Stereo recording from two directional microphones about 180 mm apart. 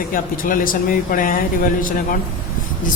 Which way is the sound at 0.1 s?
50° left (ahead or behind).